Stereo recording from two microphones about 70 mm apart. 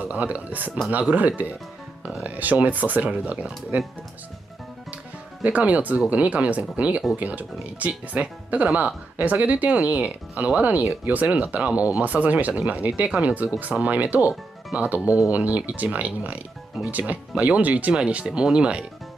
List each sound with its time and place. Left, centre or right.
0.1 s speech: right
5.4 s speech: right
17.9 s speech: centre